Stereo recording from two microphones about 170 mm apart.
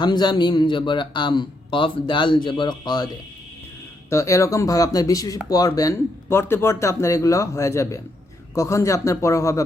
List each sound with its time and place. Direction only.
0.0 s a man's voice: 25° left (ahead or behind)
4.1 s a man's voice: 20° left (ahead or behind)